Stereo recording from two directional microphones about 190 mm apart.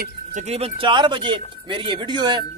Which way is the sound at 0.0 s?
40° right (ahead or behind).